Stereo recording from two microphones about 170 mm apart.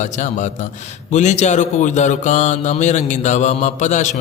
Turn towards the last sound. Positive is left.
turn(degrees=45)  # may be behind; listen again after turning